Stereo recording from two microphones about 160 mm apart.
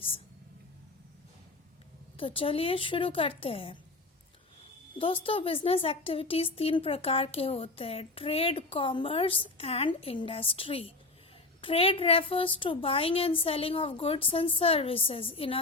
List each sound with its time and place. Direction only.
2.1 s speech: 35° left (ahead or behind)
4.9 s speech: 35° left (ahead or behind)